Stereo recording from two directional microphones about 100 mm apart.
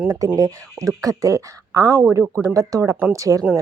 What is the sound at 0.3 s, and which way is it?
Speech, 35° right (ahead or behind).